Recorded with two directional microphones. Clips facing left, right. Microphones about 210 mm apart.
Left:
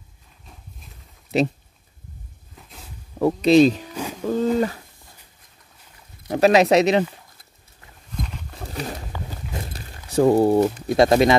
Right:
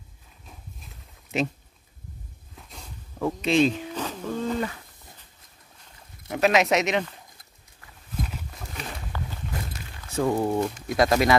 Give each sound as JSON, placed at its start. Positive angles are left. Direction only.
{"t": 1.3, "sound": "speech", "side_deg": 35}
{"t": 2.5, "sound": "a sound", "side_deg": 0}
{"t": 3.4, "sound": "speech", "side_deg": 40}
{"t": 3.9, "sound": "a sound", "side_deg": 10}
{"t": 4.3, "sound": "bird", "side_deg": 35}
{"t": 6.3, "sound": "speech", "side_deg": 35}
{"t": 8.2, "sound": "wild animals", "side_deg": -5}
{"t": 8.5, "sound": "a sound", "side_deg": 35}
{"t": 9.7, "sound": "speech", "side_deg": 35}